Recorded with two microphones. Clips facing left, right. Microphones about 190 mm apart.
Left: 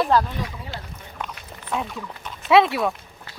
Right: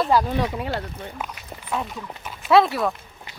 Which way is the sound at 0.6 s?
70° right (ahead or behind).